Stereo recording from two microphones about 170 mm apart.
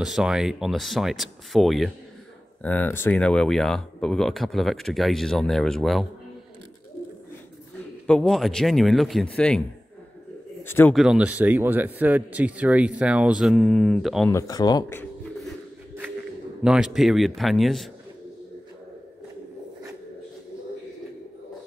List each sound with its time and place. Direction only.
0.0 s speech: 5° right (ahead or behind)
2.6 s speech: 10° left (ahead or behind)
8.1 s speech: 5° left (ahead or behind)
10.6 s a man's voice: 10° left (ahead or behind)
11.0 s speech: 5° right (ahead or behind)
14.3 s speech: 20° left (ahead or behind)
16.6 s speech: 5° right (ahead or behind)